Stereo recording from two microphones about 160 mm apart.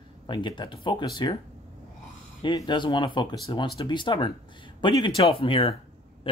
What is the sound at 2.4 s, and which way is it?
Speech, 30° left (ahead or behind).